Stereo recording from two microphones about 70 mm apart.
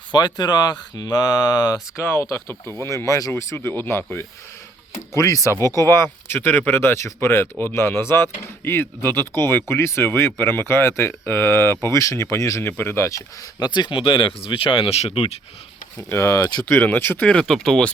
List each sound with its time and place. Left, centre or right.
0.1 s speech: left
2.0 s speech: left
3.1 s speech: left
3.5 s speech: left
5.1 s speech: left
13.1 s speech: left
13.6 s speech: left
16.0 s speech: left
16.6 s speech: left
17.2 s speech: centre